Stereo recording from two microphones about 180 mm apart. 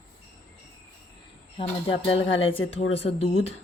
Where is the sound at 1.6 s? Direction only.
30° left (ahead or behind).